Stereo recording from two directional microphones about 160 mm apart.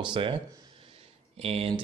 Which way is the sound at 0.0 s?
30° right (ahead or behind).